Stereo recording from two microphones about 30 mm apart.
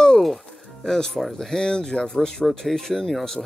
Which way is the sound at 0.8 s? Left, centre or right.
Centre.